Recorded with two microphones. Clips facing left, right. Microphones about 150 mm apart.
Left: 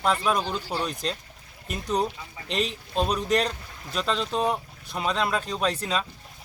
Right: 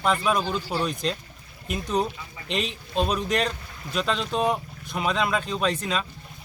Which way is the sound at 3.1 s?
35° left (ahead or behind).